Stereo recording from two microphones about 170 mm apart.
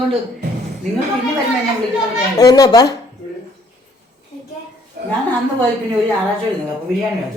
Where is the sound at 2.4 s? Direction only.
20° left (ahead or behind).